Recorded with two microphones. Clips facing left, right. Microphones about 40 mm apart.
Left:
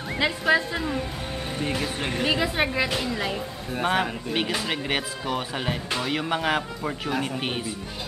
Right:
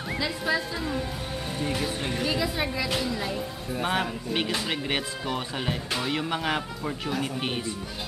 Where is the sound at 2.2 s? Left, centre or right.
Left.